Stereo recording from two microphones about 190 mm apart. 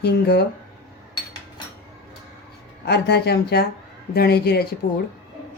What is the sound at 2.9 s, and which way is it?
Speech, 60° left (ahead or behind).